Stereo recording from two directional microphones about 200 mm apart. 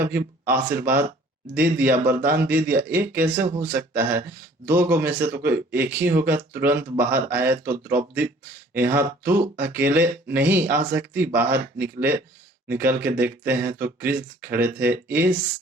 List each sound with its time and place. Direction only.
0.8 s speech: 10° right (ahead or behind)